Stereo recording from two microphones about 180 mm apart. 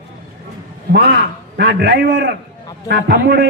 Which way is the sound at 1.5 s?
65° right (ahead or behind).